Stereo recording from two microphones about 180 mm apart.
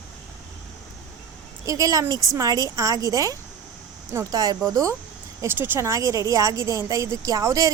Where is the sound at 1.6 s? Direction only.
20° right (ahead or behind).